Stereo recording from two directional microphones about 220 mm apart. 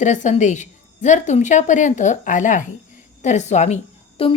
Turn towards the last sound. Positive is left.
turn(degrees=25)  # may be behind; listen again after turning